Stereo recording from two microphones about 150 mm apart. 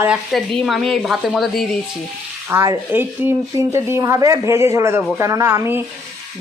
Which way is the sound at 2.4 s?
20° right (ahead or behind).